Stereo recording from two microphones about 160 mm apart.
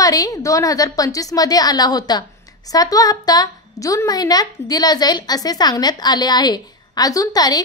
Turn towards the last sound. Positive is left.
turn(degrees=25)  # may be behind; listen again after turning